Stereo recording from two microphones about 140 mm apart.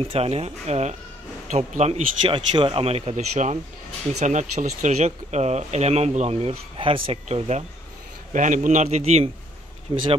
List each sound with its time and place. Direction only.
0.0 s a man's voice: 45° right (ahead or behind)
2.2 s speech: 35° right (ahead or behind)
8.3 s a man's voice: 65° right (ahead or behind)